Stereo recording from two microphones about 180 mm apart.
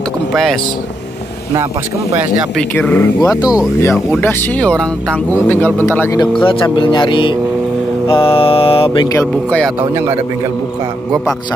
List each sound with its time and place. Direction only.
0.3 s speech: centre (ahead or behind)
2.5 s speech: 10° left (ahead or behind)
3.2 s speech: 20° left (ahead or behind)
3.9 s speech: 10° left (ahead or behind)
6.3 s speech: 30° left (ahead or behind)
8.1 s mantra: 30° left (ahead or behind)
9.8 s speech: 15° right (ahead or behind)